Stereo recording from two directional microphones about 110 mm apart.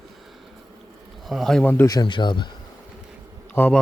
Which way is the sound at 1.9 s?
40° left (ahead or behind).